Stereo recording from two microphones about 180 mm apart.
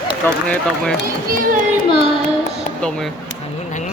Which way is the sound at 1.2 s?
50° right (ahead or behind).